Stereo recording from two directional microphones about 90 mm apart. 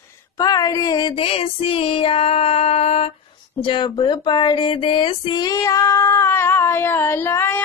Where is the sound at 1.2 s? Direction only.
90° left.